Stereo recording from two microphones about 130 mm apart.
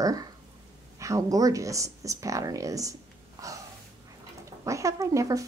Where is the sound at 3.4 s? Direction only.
25° right (ahead or behind).